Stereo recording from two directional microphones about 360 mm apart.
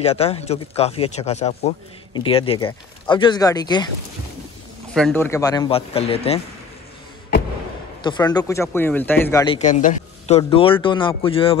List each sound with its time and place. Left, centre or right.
0.0 s speech: centre
4.9 s speech: centre
8.0 s speech: centre